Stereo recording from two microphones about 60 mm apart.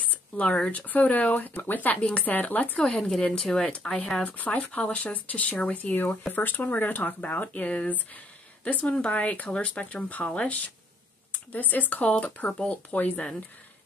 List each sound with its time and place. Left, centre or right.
0.1 s speech: left
2.8 s a woman's voice: centre; by 13.3 s left